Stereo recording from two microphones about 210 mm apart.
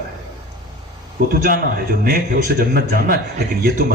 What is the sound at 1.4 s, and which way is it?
A man's voice, 45° right (ahead or behind).